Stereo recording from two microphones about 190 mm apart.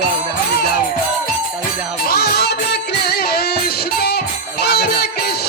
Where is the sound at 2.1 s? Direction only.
55° left (ahead or behind).